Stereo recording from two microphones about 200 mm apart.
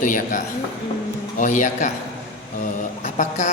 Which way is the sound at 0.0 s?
40° left (ahead or behind).